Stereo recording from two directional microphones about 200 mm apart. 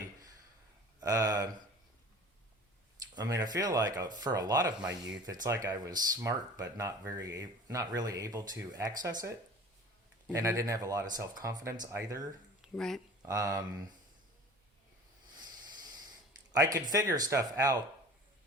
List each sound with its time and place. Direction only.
1.0 s speech: 20° right (ahead or behind)
3.2 s speech: 20° right (ahead or behind)
10.3 s speech: 15° right (ahead or behind)
12.6 s speech: centre (ahead or behind)
13.2 s speech: 15° right (ahead or behind)
15.4 s a sound: 20° right (ahead or behind)
16.5 s speech: 15° right (ahead or behind)